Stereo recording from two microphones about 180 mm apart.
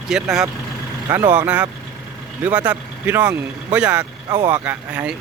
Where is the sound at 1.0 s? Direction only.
20° right (ahead or behind).